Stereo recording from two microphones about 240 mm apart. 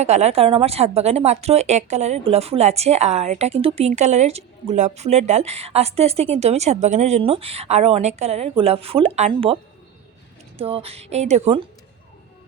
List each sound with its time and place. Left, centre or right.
0.0 s a woman's voice: right
10.6 s a woman's voice: right